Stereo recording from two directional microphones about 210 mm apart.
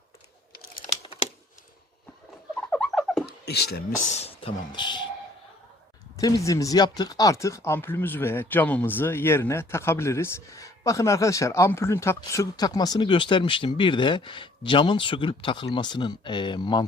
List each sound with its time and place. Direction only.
2.6 s rodents: 5° left (ahead or behind)
3.4 s speech: 50° left (ahead or behind)
4.1 s speech: 30° left (ahead or behind)
6.1 s speech: 15° left (ahead or behind)